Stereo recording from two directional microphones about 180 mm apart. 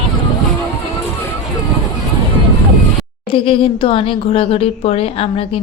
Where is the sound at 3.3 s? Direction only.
30° left (ahead or behind).